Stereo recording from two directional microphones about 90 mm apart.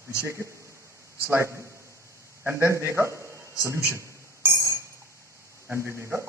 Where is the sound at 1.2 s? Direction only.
30° right (ahead or behind).